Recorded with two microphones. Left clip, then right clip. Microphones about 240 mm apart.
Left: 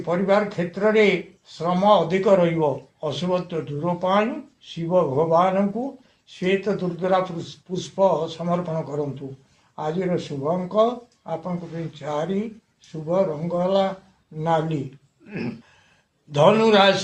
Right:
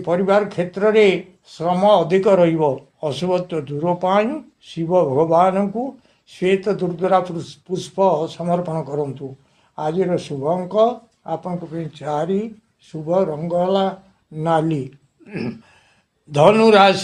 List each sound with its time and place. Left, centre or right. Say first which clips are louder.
0.0 s speech: right 4 dB; right
16.3 s speech: right 4 dB; right